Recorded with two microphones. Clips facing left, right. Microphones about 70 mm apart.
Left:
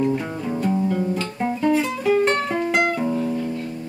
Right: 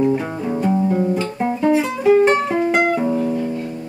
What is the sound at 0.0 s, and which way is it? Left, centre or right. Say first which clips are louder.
Music: right 4 dB; centre.